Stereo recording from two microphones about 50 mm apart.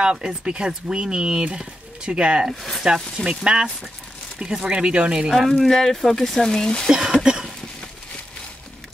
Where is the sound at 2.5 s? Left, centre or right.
Centre.